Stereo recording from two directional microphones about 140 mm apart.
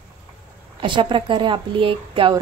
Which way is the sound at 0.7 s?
35° right (ahead or behind).